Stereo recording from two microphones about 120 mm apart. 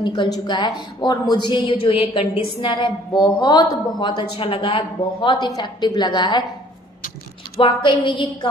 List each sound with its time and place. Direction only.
0.0 s a woman's voice: 40° left (ahead or behind)
5.5 s a woman's voice: 30° left (ahead or behind)
7.5 s a woman's voice: 45° left (ahead or behind)